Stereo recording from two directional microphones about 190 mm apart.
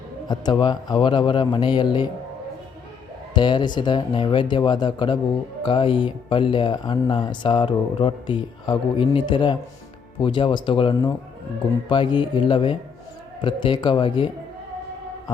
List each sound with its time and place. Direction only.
0.3 s speech: 20° left (ahead or behind)
3.3 s speech: 25° left (ahead or behind)